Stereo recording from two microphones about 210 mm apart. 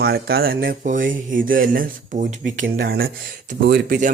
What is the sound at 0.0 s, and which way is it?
Speech, 45° right (ahead or behind).